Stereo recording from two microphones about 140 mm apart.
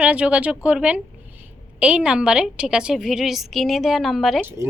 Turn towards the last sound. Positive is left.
turn(degrees=0)  # may be behind; listen again after turning